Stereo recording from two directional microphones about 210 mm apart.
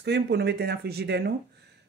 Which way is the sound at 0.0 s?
50° right (ahead or behind).